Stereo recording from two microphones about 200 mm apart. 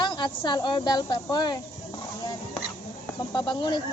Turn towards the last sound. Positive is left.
turn(degrees=25)  # may be behind; listen again after turning